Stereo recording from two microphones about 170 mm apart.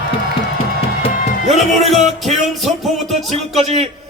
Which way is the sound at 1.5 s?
40° right (ahead or behind).